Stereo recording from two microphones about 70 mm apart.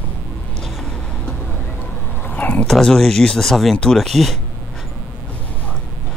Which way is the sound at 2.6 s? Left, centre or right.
Centre.